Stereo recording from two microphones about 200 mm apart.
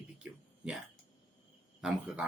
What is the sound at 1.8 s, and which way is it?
Speech, 5° right (ahead or behind).